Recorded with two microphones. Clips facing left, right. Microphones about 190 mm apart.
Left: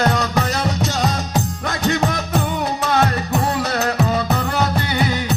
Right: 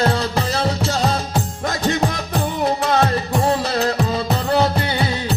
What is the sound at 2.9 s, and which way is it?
Music, 30° right (ahead or behind).